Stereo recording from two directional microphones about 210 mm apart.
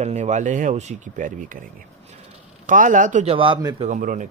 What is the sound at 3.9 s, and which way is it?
Speech, 40° right (ahead or behind).